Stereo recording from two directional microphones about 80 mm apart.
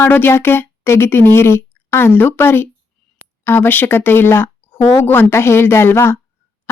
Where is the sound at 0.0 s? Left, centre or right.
Left.